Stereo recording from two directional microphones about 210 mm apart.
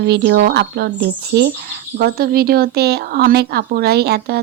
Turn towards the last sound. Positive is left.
turn(degrees=-50)  # may be behind; listen again after turning